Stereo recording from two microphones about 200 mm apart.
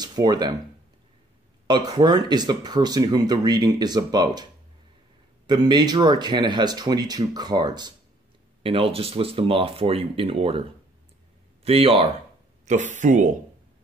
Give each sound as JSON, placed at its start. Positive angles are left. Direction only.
{"t": 0.0, "sound": "speech", "side_deg": -20}
{"t": 1.7, "sound": "speech", "side_deg": -20}
{"t": 5.5, "sound": "speech", "side_deg": -20}
{"t": 11.6, "sound": "speech", "side_deg": -30}
{"t": 12.6, "sound": "speech", "side_deg": -40}